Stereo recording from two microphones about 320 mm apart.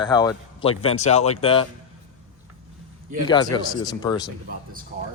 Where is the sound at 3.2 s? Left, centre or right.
Centre.